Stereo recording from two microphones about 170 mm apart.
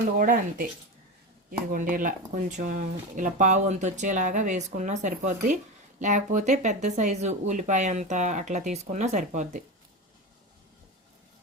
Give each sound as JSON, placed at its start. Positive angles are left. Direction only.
{"t": 0.2, "sound": "speech", "side_deg": -55}